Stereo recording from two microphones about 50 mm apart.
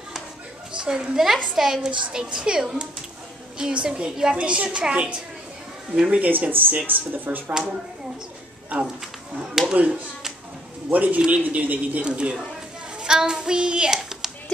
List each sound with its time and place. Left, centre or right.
0.7 s a woman's voice: centre
6.2 s speech: right
9.3 s a woman's voice: centre
10.9 s speech: right
11.1 s speech: right
11.4 s speech: right
12.1 s speech: centre
13.0 s child singing: centre
13.9 s hands: centre